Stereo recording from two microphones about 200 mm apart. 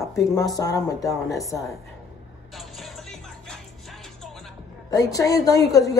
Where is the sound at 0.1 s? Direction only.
15° left (ahead or behind).